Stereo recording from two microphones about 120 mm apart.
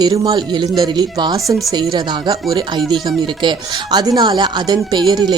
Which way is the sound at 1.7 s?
40° right (ahead or behind).